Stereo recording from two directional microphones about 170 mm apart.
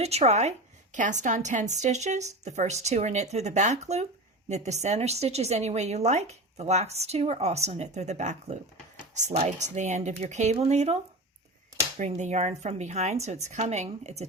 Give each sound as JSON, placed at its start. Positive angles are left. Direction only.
{"t": 0.0, "sound": "a woman's voice", "side_deg": -40}
{"t": 9.6, "sound": "speech", "side_deg": -45}
{"t": 11.9, "sound": "a woman's voice", "side_deg": -45}